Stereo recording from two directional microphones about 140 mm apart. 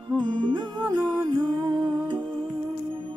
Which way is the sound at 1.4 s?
35° right (ahead or behind).